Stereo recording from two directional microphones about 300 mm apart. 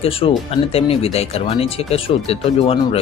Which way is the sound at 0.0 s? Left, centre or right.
Centre.